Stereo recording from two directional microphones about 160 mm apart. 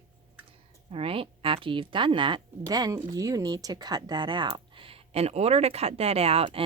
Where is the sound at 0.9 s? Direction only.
35° right (ahead or behind).